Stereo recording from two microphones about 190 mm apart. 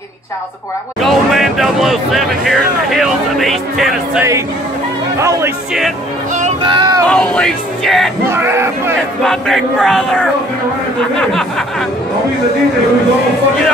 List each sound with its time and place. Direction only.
1.0 s speech: centre (ahead or behind)
5.2 s speech: 15° right (ahead or behind)
6.6 s speech: 25° right (ahead or behind)
7.1 s speech: 5° left (ahead or behind)
8.3 s a sound: 10° right (ahead or behind)
9.2 s speech: centre (ahead or behind)